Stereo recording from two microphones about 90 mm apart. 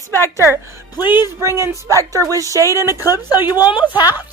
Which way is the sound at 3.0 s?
45° left (ahead or behind).